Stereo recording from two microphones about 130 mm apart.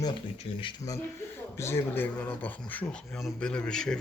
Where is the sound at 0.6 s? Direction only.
40° left (ahead or behind).